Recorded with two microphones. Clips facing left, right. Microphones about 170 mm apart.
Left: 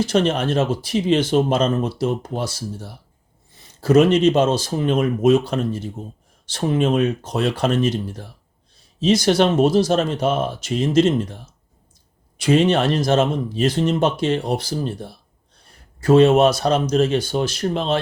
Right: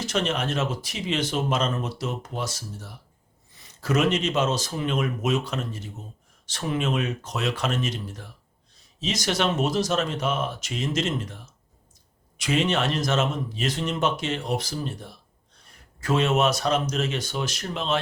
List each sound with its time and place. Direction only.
0.0 s speech: 30° left (ahead or behind)
15.6 s a sound: 30° left (ahead or behind)
16.4 s speech: 30° left (ahead or behind)